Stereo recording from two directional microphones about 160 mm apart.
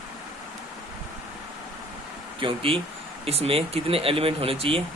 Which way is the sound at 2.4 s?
35° right (ahead or behind).